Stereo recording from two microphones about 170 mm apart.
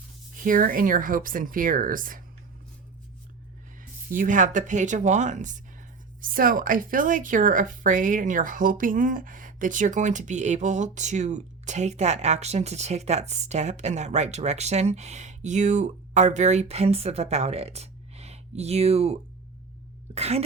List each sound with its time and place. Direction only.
0.3 s speech: 55° right (ahead or behind)
3.8 s speech: 50° right (ahead or behind)
6.2 s speech: 55° right (ahead or behind); by 20.4 s 40° right (ahead or behind)